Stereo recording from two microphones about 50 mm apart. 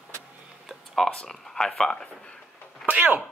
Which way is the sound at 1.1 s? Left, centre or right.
Centre.